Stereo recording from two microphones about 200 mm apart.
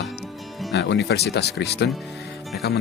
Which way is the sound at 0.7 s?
55° left (ahead or behind).